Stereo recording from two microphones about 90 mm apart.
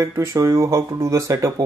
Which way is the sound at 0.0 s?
35° right (ahead or behind).